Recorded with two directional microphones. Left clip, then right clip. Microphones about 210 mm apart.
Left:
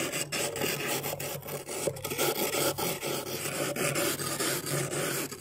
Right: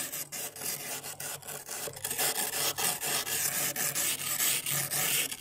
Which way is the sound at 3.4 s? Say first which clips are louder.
Left 3 dB; 20° right (ahead or behind).